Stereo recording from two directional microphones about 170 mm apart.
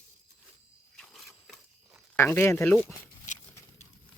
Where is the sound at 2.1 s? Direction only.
15° left (ahead or behind).